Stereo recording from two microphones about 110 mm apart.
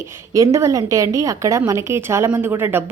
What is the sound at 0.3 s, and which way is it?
Speech, 25° right (ahead or behind).